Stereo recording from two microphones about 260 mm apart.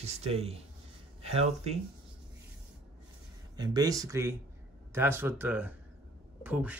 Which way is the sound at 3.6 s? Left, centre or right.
Centre.